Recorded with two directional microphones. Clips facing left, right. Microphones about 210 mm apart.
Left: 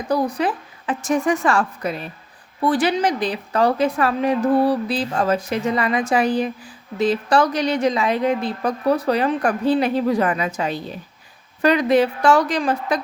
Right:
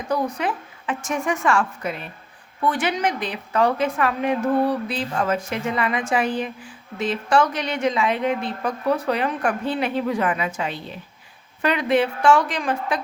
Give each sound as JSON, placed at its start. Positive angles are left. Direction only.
{"t": 0.1, "sound": "a woman's voice", "side_deg": 35}